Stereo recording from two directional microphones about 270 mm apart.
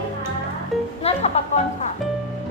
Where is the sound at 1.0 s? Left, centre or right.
Left.